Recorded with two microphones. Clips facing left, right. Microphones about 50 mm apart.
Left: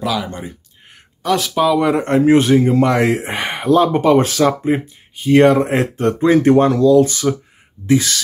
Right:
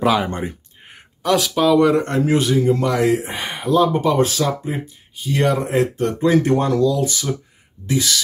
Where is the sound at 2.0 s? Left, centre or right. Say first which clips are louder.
Left 5 dB; left.